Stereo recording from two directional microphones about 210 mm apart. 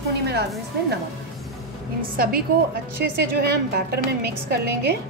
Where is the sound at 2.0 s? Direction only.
45° right (ahead or behind).